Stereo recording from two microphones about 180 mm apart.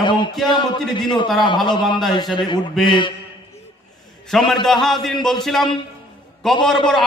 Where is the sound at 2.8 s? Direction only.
25° left (ahead or behind).